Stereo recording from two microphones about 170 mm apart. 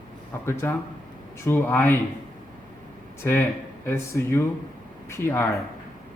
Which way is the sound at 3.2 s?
15° left (ahead or behind).